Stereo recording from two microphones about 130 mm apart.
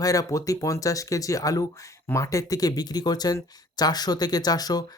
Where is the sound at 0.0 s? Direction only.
25° left (ahead or behind).